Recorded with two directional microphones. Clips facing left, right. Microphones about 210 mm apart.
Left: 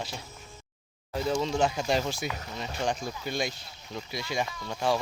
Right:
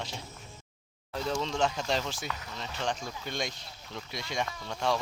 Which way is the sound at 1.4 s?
10° left (ahead or behind).